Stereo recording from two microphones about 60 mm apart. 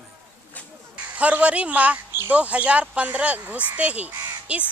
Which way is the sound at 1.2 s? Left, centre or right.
Right.